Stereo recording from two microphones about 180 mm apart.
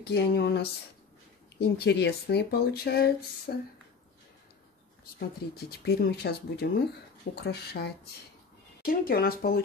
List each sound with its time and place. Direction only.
0.0 s speech: 65° left (ahead or behind)
5.7 s speech: 60° left (ahead or behind)